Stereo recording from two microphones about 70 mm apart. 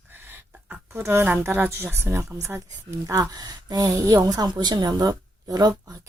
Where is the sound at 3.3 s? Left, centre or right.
Right.